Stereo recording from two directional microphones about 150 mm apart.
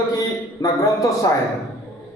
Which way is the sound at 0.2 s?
25° left (ahead or behind).